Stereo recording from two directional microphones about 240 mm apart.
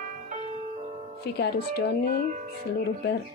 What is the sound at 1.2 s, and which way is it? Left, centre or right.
Speech, left.